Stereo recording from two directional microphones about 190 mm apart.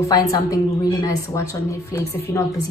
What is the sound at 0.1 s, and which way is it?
A woman's voice, 20° left (ahead or behind).